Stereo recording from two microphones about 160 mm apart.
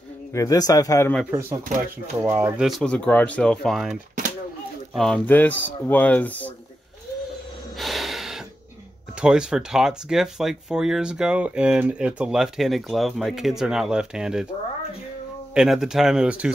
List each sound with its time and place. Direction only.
0.3 s a man's voice: 20° left (ahead or behind)
2.2 s speech: 10° right (ahead or behind)
2.8 s speech: 5° left (ahead or behind)
7.7 s snort: centre (ahead or behind)
9.2 s speech: 5° right (ahead or behind)
15.5 s speech: 5° right (ahead or behind)